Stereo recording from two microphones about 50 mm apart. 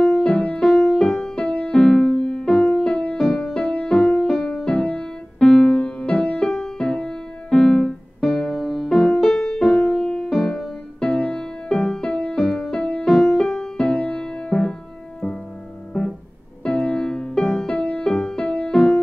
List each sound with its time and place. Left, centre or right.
0.0 s music: centre
8.5 s music: centre
16.6 s music: centre